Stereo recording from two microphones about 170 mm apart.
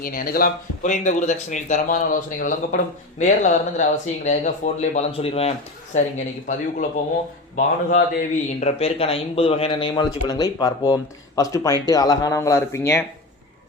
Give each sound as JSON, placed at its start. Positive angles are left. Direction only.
{"t": 0.0, "sound": "speech", "side_deg": 55}
{"t": 8.6, "sound": "a man's voice", "side_deg": 35}